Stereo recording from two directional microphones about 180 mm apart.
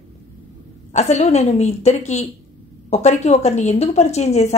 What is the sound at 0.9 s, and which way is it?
Speech, 40° left (ahead or behind).